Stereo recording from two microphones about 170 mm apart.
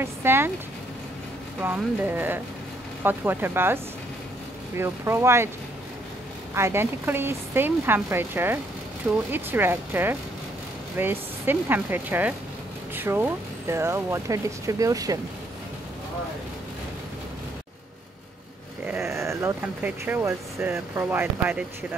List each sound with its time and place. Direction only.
0.0 s speech: 15° right (ahead or behind)
1.6 s speech: 10° right (ahead or behind)
6.5 s speech: 15° right (ahead or behind)
18.9 s speech: 15° right (ahead or behind)